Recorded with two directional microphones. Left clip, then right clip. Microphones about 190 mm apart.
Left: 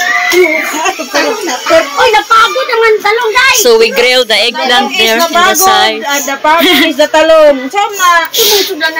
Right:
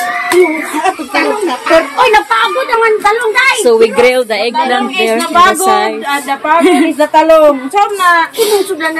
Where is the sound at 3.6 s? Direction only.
Centre (ahead or behind).